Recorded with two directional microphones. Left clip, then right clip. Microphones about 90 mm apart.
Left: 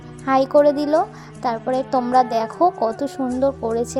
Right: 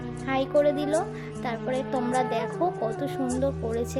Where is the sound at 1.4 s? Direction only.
40° left (ahead or behind).